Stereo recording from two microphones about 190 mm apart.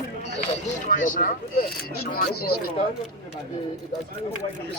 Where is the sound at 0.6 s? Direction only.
45° left (ahead or behind).